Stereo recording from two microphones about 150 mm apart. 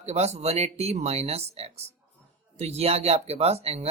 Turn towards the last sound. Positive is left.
turn(degrees=-45)  # may be behind; listen again after turning